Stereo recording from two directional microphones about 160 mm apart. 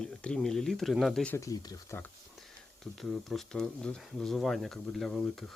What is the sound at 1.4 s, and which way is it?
Speech, 20° left (ahead or behind).